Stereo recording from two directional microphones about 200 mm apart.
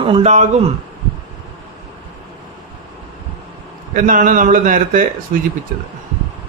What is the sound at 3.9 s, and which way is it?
A man's voice, 40° right (ahead or behind).